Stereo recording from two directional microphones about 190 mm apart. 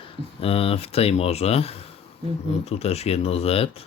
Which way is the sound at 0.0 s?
30° left (ahead or behind).